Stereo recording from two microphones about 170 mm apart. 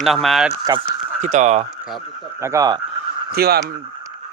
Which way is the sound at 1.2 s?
45° right (ahead or behind).